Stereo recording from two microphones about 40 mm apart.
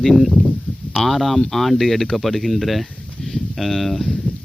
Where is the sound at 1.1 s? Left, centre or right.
Centre.